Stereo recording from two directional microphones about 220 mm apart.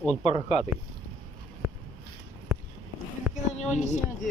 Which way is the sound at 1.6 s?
Centre (ahead or behind).